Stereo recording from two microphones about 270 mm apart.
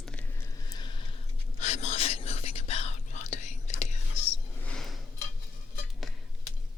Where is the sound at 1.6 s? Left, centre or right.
Left.